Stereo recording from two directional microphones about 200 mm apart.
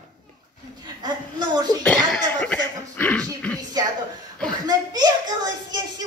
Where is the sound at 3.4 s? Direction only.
5° left (ahead or behind).